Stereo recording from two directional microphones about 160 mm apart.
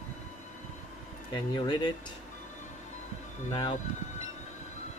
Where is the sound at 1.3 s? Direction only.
30° left (ahead or behind).